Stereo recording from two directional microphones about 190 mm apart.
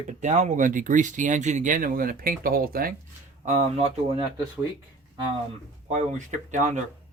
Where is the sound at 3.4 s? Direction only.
35° right (ahead or behind).